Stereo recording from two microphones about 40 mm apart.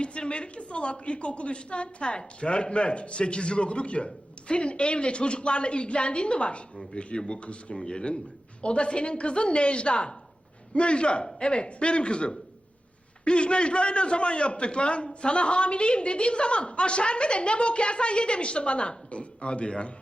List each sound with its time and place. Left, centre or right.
0.0 s a man's voice: left